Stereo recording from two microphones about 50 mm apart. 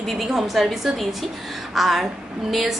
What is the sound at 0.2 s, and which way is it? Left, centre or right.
A woman's voice, centre.